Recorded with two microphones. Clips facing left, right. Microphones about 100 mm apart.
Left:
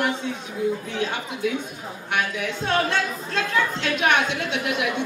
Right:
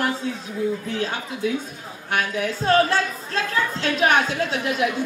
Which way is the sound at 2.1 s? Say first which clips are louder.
Right 2 dB; 40° right (ahead or behind).